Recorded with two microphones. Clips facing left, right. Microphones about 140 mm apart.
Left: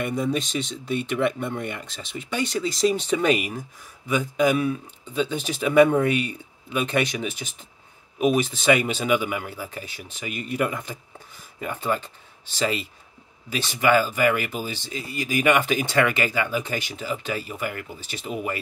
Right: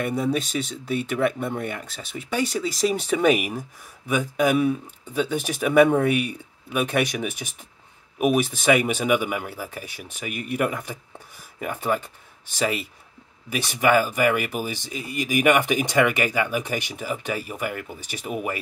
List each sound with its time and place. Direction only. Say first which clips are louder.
0.0 s speech: right 1 dB; 5° right (ahead or behind)
5.3 s speech: right 1 dB; 10° right (ahead or behind)